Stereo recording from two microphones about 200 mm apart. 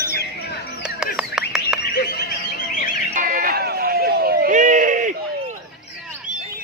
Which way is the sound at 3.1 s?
40° right (ahead or behind).